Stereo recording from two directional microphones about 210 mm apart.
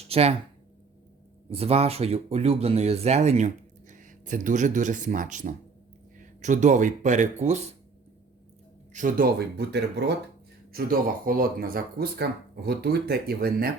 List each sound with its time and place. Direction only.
0.1 s a woman's voice: 30° right (ahead or behind)
1.5 s speech: 30° right (ahead or behind)
8.9 s speech: 35° right (ahead or behind)